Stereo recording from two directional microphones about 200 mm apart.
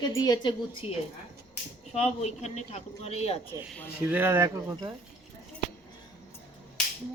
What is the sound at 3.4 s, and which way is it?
Speech, 10° left (ahead or behind).